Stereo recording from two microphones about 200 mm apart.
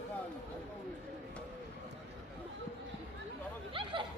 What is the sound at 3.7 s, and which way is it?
Speech, 25° right (ahead or behind).